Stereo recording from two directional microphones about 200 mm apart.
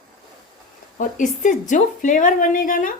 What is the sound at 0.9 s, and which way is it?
A woman's voice, 40° left (ahead or behind).